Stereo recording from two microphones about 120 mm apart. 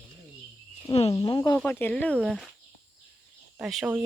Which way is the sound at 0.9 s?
30° left (ahead or behind).